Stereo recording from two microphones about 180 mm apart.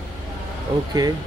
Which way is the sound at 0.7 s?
30° right (ahead or behind).